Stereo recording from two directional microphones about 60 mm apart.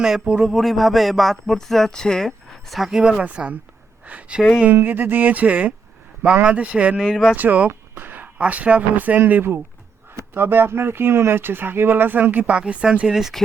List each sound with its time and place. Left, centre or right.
0.0 s speech: centre
0.4 s speech: centre
3.0 s speech: centre
4.7 s speech: right; by 7.0 s centre
7.0 s speech: centre
7.3 s speech: right